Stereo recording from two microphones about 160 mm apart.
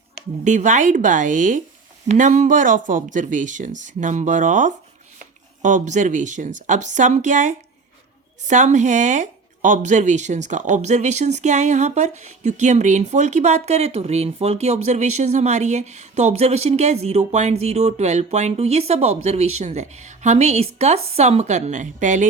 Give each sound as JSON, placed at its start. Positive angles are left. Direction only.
{"t": 0.4, "sound": "speech", "side_deg": -50}